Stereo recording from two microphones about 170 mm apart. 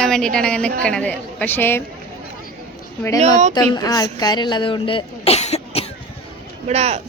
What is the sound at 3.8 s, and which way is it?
Speech, 20° left (ahead or behind).